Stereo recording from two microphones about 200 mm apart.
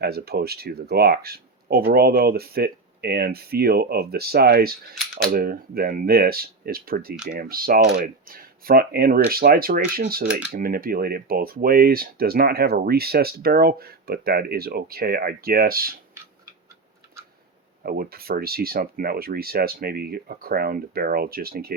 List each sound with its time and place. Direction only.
0.0 s speech: 50° right (ahead or behind)
17.8 s speech: 50° right (ahead or behind)